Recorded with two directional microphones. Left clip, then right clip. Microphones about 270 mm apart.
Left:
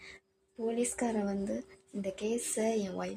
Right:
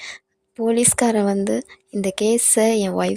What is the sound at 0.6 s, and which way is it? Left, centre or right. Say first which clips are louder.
Speech: right 15 dB; right.